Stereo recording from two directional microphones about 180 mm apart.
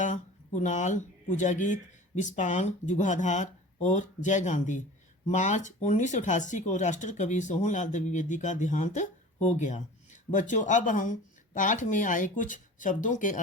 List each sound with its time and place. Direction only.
0.0 s speech: 45° left (ahead or behind)